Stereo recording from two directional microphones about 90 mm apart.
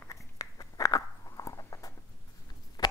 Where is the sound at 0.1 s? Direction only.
40° left (ahead or behind).